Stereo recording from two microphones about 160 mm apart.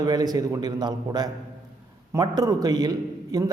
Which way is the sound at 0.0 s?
25° right (ahead or behind).